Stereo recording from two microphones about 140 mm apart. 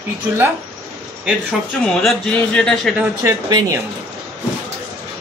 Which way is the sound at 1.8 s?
5° left (ahead or behind).